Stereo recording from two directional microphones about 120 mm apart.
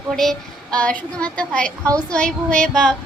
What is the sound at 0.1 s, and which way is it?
A woman's voice, 5° left (ahead or behind).